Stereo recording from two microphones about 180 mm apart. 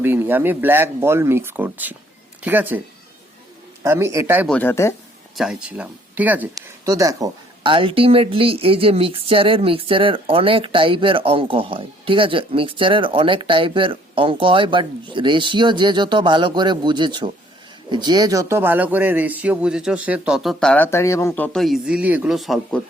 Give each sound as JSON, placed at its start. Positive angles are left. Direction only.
{"t": 0.0, "sound": "speech", "side_deg": -10}
{"t": 3.8, "sound": "speech", "side_deg": -15}
{"t": 4.4, "sound": "speech", "side_deg": 10}
{"t": 5.4, "sound": "speech", "side_deg": -5}
{"t": 6.5, "sound": "a man's voice", "side_deg": -20}